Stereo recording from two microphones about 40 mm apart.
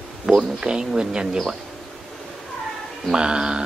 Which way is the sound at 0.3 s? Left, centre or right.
Centre.